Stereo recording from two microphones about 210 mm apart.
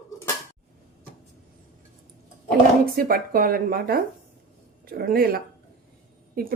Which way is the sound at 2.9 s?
45° right (ahead or behind).